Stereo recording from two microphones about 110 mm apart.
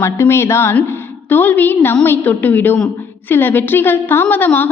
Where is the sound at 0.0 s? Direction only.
20° left (ahead or behind).